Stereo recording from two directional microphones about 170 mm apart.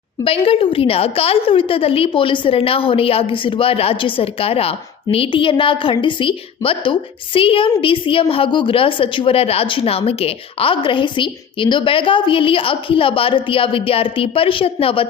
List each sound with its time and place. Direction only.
0.3 s a woman's voice: 35° left (ahead or behind)